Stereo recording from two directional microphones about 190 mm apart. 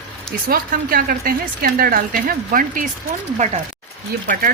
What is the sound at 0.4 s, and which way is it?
A woman's voice, 50° right (ahead or behind).